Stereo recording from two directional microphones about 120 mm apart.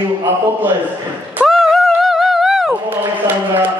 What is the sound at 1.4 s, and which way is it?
Music, centre (ahead or behind).